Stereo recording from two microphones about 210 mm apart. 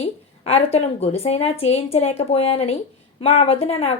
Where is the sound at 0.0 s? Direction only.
30° left (ahead or behind).